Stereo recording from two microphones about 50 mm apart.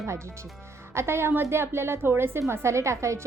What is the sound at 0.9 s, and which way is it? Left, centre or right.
A woman's voice, right.